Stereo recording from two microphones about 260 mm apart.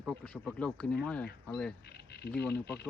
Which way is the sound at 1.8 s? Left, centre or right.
Left.